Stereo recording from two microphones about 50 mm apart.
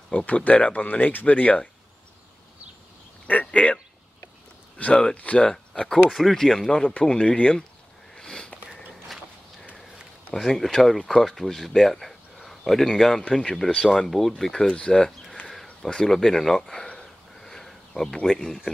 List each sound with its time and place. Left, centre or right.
0.1 s speech: left
3.3 s a sound: left
5.1 s speech: left
5.9 s speech: centre
8.1 s sniff: centre
10.3 s speech: centre
17.0 s a sound: centre
18.3 s speech: centre